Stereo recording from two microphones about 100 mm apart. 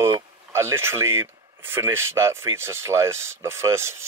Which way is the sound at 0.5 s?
25° right (ahead or behind).